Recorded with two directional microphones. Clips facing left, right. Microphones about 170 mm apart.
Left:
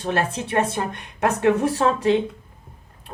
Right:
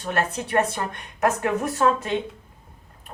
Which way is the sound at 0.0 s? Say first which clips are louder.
Left 2 dB; 30° left (ahead or behind).